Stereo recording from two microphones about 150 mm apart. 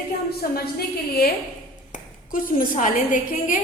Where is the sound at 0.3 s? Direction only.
90° left.